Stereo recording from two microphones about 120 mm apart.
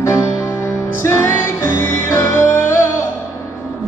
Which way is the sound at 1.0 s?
20° left (ahead or behind).